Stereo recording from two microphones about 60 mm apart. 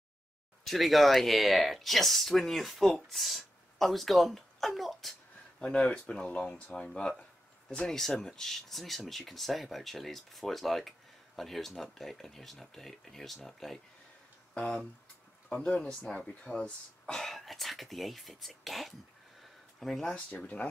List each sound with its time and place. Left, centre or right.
0.7 s speech: centre
5.6 s speech: centre
14.5 s speech: centre
17.1 s speech: centre
20.2 s speech: left